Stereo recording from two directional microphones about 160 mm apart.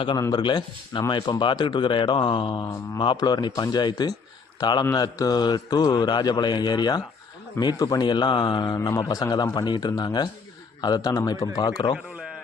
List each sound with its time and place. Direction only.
0.0 s speech: 25° left (ahead or behind)